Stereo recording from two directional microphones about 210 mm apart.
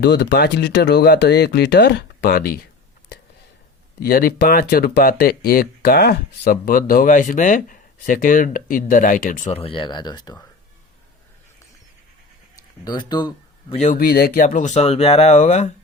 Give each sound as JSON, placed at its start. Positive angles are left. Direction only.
{"t": 0.0, "sound": "speech", "side_deg": 55}
{"t": 4.0, "sound": "speech", "side_deg": 45}
{"t": 12.8, "sound": "speech", "side_deg": 20}
{"t": 13.8, "sound": "speech", "side_deg": 45}